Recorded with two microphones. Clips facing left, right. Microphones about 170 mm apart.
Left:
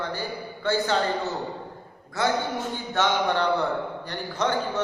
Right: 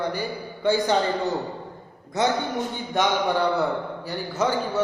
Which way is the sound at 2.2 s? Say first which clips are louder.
Right 2 dB; 20° right (ahead or behind).